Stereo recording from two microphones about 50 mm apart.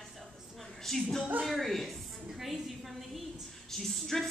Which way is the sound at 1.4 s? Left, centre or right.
Centre.